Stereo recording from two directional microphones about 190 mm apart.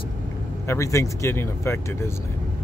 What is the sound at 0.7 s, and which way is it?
Speech, 15° left (ahead or behind).